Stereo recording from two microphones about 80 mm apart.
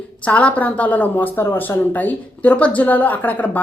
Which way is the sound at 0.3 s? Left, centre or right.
Centre.